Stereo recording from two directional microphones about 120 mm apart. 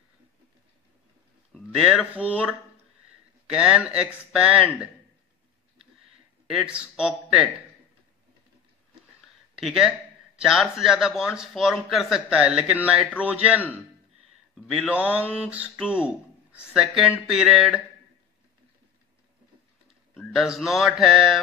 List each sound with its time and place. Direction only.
1.5 s a man's voice: centre (ahead or behind)
6.4 s speech: 5° right (ahead or behind)
9.6 s a man's voice: centre (ahead or behind)
20.2 s a man's voice: 5° right (ahead or behind)